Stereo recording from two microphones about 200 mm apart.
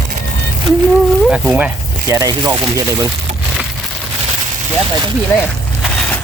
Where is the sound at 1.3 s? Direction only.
5° right (ahead or behind).